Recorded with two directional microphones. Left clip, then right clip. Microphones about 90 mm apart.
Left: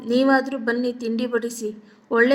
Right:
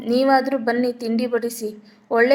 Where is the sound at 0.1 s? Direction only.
Centre (ahead or behind).